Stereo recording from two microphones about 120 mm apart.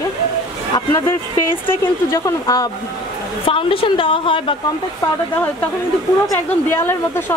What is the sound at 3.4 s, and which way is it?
A woman's voice, 50° left (ahead or behind).